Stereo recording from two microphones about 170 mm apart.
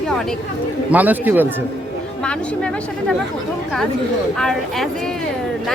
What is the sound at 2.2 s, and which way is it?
Speech, 5° left (ahead or behind).